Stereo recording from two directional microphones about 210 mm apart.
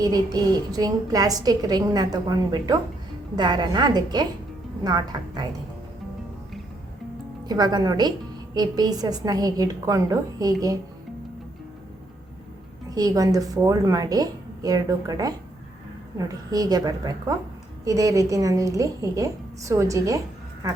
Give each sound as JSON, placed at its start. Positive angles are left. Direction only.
{"t": 0.0, "sound": "a woman's voice", "side_deg": -20}
{"t": 7.4, "sound": "a woman's voice", "side_deg": -20}
{"t": 12.9, "sound": "a woman's voice", "side_deg": -15}